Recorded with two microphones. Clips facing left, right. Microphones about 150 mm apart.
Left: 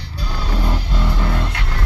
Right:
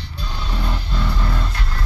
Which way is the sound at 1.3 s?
65° left (ahead or behind).